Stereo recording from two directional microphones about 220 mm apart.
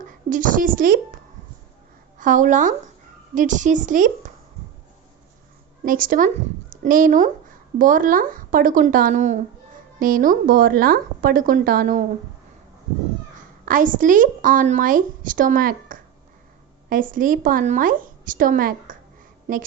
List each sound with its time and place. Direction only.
0.3 s a woman's voice: 40° right (ahead or behind)
5.8 s a woman's voice: 40° right (ahead or behind)
13.7 s a woman's voice: 35° right (ahead or behind)